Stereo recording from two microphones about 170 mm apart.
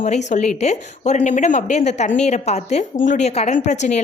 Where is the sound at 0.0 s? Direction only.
45° left (ahead or behind).